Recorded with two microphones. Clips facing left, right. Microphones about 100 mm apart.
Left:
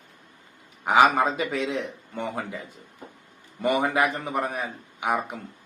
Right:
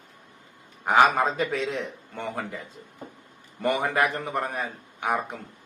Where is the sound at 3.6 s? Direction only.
15° left (ahead or behind).